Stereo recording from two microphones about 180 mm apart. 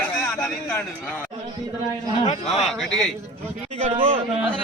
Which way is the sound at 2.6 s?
Centre (ahead or behind).